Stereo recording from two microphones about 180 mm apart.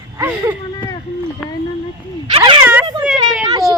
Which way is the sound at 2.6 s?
10° right (ahead or behind).